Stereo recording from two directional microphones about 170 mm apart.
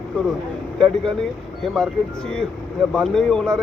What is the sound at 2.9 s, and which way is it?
Speech, 5° left (ahead or behind).